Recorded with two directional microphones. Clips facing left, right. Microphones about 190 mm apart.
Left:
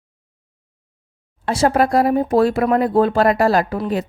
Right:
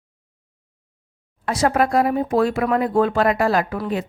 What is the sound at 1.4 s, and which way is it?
A woman's voice, 30° left (ahead or behind).